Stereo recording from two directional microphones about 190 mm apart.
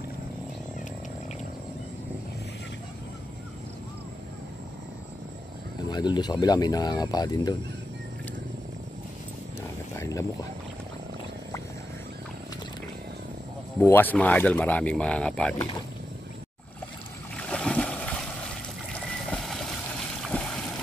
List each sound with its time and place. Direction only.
5.9 s speech: 20° left (ahead or behind)
9.6 s a sound: 15° left (ahead or behind)
13.7 s speech: 10° left (ahead or behind)
17.4 s water: 5° left (ahead or behind)
19.3 s a sound: centre (ahead or behind)
20.2 s boat: 5° left (ahead or behind)